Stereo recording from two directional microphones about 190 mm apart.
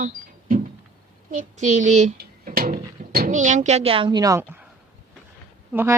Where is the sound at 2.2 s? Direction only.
55° right (ahead or behind); by 4.5 s 15° right (ahead or behind).